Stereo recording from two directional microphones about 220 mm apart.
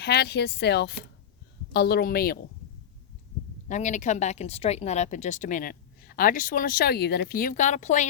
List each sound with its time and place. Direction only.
0.0 s speech: 50° left (ahead or behind)
3.7 s speech: 35° left (ahead or behind)